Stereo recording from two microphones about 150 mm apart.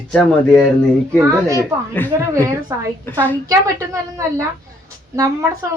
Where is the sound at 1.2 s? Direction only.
20° right (ahead or behind).